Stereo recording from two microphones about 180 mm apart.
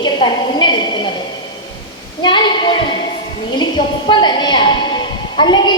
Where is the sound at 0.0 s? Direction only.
25° left (ahead or behind).